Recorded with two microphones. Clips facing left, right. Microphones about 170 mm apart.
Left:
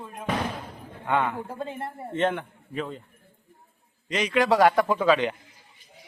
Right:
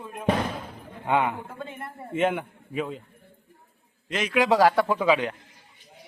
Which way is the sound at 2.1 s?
10° right (ahead or behind).